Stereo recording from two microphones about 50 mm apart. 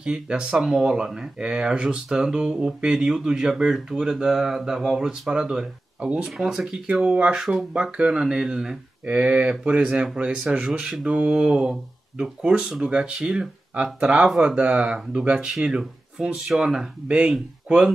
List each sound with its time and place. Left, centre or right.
0.0 s speech: centre
5.9 s speech: right
6.4 s speech: centre
6.9 s speech: right